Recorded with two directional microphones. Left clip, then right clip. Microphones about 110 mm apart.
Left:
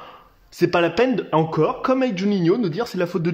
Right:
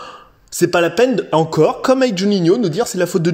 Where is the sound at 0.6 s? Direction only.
25° right (ahead or behind).